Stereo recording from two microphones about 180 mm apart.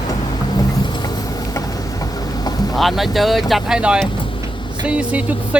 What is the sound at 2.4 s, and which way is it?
Boat, 20° left (ahead or behind).